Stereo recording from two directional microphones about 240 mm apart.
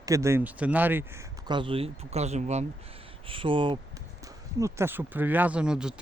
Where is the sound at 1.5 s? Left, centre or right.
Right.